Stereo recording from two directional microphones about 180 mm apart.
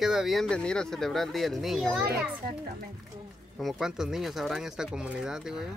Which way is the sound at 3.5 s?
Centre (ahead or behind).